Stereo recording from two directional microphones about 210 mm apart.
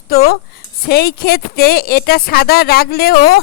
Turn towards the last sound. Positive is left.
turn(degrees=45)  # may be behind; listen again after turning